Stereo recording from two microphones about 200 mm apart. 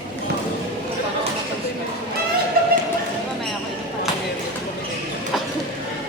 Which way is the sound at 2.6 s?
50° right (ahead or behind).